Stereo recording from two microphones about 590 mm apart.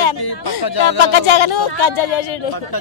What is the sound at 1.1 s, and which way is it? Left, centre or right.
A woman's voice, left.